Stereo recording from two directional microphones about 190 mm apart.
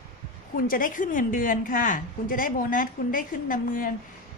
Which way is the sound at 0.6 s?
45° left (ahead or behind).